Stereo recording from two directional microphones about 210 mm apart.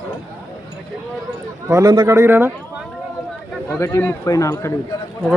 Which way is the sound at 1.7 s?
20° right (ahead or behind).